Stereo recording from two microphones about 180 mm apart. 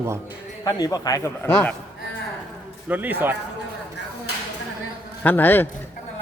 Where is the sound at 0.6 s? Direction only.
20° left (ahead or behind).